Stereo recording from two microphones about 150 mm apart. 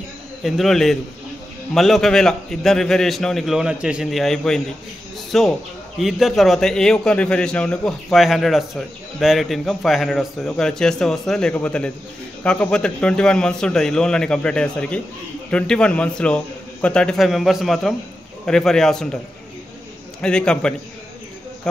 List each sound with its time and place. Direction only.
0.4 s a man's voice: centre (ahead or behind)
20.2 s a man's voice: 5° left (ahead or behind)